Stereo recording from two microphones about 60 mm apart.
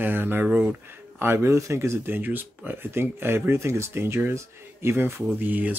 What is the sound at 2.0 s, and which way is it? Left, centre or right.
Speech, right.